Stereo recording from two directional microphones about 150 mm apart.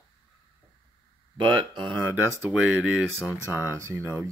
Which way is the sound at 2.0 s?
15° right (ahead or behind).